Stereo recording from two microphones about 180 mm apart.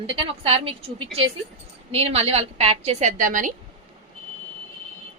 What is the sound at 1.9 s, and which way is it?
A woman's voice, 35° right (ahead or behind).